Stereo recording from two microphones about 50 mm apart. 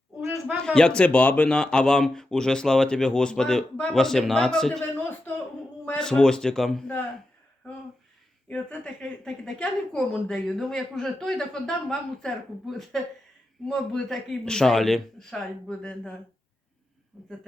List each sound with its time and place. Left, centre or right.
0.5 s speech: centre
4.9 s a sound: left
6.0 s speech: centre
8.4 s speech: left; by 15.4 s centre
15.8 s speech: centre
17.2 s speech: centre